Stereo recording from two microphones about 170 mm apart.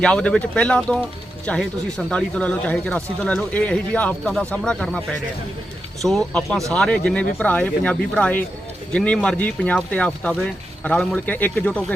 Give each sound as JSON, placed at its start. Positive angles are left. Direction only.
{"t": 0.0, "sound": "speech", "side_deg": 5}